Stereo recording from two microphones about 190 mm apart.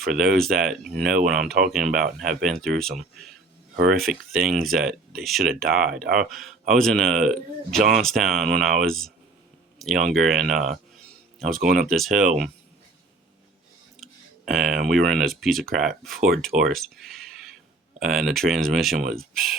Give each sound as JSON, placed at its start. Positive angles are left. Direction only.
{"t": 0.0, "sound": "speech", "side_deg": 0}
{"t": 3.8, "sound": "speech", "side_deg": -55}
{"t": 4.0, "sound": "speech", "side_deg": 0}
{"t": 7.8, "sound": "speech", "side_deg": -40}
{"t": 8.0, "sound": "speech", "side_deg": 0}
{"t": 14.0, "sound": "clicking", "side_deg": 0}
{"t": 14.8, "sound": "speech", "side_deg": 0}